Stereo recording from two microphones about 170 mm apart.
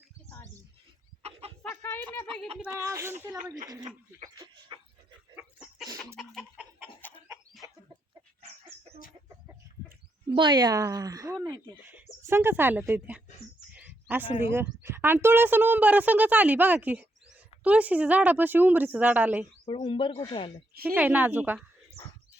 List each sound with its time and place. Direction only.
0.3 s bird: 15° left (ahead or behind)
1.2 s chicken: 35° right (ahead or behind)
1.7 s a sound: 10° left (ahead or behind)
2.6 s speech: 15° right (ahead or behind)
4.7 s a sound: 30° right (ahead or behind)
6.1 s a sound: centre (ahead or behind)
7.0 s chicken: 10° left (ahead or behind)
7.6 s chicken: 20° right (ahead or behind)
10.3 s speech: 25° right (ahead or behind); by 13.2 s 10° right (ahead or behind)
13.7 s a sound: 10° right (ahead or behind)
14.5 s speech: 15° right (ahead or behind)
19.6 s speech: 30° left (ahead or behind)
20.8 s speech: 10° right (ahead or behind)